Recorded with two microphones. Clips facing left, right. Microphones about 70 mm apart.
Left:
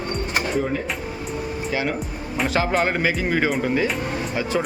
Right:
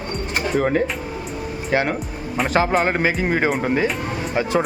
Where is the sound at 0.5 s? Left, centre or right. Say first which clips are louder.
Right 7 dB; right.